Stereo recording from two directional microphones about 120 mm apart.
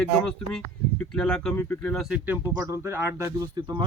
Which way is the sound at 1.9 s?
Centre (ahead or behind).